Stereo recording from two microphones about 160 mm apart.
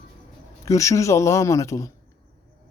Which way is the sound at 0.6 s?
20° left (ahead or behind).